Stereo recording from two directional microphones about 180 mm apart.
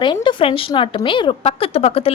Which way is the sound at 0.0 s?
25° left (ahead or behind).